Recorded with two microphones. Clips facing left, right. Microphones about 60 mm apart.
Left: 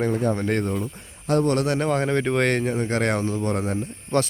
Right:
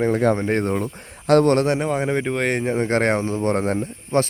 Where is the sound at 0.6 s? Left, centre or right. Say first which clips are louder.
Right 4 dB; right.